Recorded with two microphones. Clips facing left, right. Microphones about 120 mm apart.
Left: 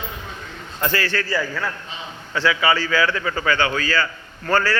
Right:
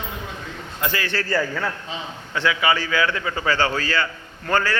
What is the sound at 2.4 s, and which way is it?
A man's voice, 20° right (ahead or behind).